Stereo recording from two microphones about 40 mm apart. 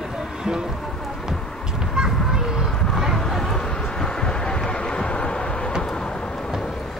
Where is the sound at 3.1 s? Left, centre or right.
Centre; by 5.7 s left.